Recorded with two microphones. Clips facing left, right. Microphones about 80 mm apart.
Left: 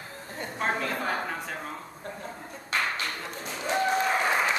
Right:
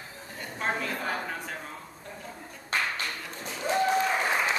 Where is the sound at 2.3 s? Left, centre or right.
Left.